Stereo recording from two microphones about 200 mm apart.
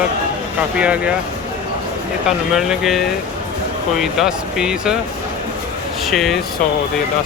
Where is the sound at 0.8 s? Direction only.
5° right (ahead or behind).